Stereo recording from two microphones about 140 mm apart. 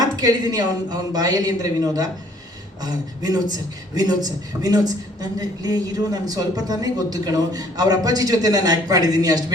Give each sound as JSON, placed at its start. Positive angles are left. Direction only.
{"t": 0.0, "sound": "a woman's voice", "side_deg": -25}